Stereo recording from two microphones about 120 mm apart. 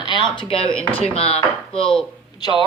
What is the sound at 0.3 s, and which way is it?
Speech, 50° left (ahead or behind).